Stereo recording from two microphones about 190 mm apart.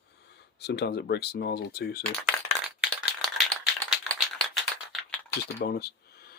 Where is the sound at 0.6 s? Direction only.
60° left (ahead or behind).